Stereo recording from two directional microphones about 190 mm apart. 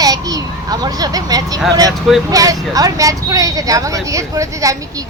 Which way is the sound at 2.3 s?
20° right (ahead or behind).